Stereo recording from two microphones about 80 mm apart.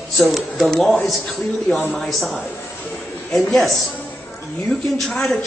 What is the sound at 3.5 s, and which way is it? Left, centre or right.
Speech, centre.